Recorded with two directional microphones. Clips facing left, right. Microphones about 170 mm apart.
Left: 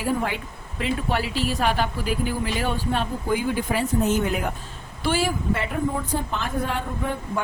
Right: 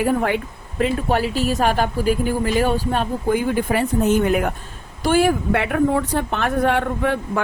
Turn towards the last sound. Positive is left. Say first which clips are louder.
# right 7 dB
turn(degrees=-80)